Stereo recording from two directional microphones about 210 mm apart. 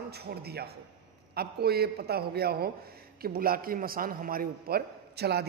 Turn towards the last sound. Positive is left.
turn(degrees=-50)  # may be behind; listen again after turning